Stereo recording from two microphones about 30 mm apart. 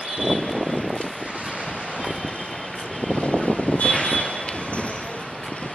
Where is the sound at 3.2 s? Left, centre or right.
Left.